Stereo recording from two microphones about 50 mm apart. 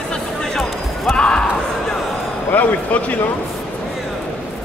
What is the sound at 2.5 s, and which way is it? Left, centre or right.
Speech, left.